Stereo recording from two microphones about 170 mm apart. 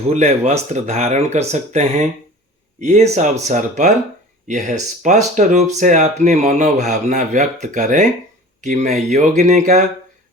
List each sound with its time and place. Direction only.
0.1 s speech: 40° right (ahead or behind)